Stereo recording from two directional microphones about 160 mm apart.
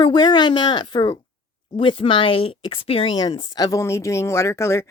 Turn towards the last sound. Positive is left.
turn(degrees=15)  # may be behind; listen again after turning